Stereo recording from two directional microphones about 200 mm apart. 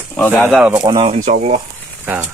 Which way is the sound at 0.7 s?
20° right (ahead or behind).